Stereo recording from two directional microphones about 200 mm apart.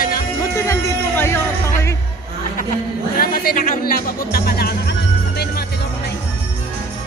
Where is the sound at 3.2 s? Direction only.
45° left (ahead or behind).